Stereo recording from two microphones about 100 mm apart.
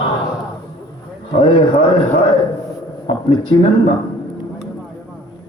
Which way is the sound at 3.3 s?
45° left (ahead or behind).